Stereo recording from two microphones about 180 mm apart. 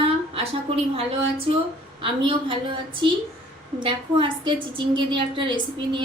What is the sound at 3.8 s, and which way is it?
A woman's voice, 30° right (ahead or behind).